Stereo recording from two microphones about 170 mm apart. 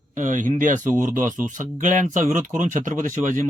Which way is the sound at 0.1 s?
50° right (ahead or behind).